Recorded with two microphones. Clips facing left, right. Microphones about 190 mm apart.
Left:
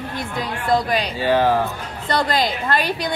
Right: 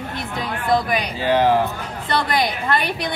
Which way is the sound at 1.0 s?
15° right (ahead or behind).